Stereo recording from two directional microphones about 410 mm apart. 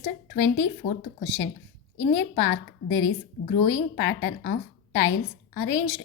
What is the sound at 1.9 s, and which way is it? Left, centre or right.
A woman's voice, left.